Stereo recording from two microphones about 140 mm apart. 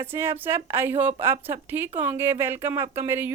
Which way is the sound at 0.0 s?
15° right (ahead or behind).